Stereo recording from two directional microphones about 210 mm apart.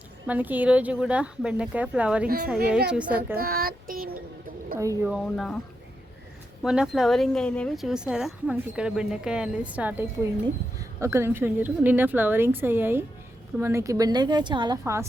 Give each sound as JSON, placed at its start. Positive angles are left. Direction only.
{"t": 0.3, "sound": "speech", "side_deg": -10}
{"t": 2.2, "sound": "a woman's voice", "side_deg": -45}
{"t": 2.9, "sound": "a woman's voice", "side_deg": -5}
{"t": 3.3, "sound": "child singing", "side_deg": -45}
{"t": 5.0, "sound": "speech", "side_deg": 0}
{"t": 6.6, "sound": "a woman's voice", "side_deg": 0}